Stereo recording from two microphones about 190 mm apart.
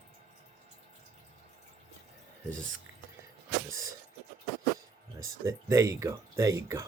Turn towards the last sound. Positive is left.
turn(degrees=-15)  # may be behind; listen again after turning